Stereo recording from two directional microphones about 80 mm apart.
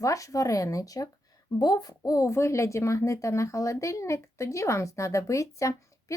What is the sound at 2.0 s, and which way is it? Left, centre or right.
Speech, left.